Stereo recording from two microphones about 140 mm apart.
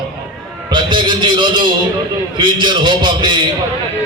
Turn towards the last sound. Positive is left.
turn(degrees=-35)  # may be behind; listen again after turning